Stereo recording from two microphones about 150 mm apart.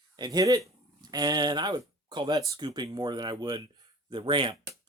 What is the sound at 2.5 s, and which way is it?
Speech, 30° right (ahead or behind).